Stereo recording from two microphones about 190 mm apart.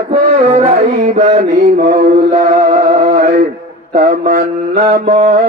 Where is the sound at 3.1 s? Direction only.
40° right (ahead or behind).